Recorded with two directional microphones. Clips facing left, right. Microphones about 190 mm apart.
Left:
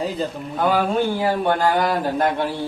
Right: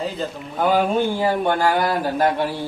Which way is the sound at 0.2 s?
Centre (ahead or behind).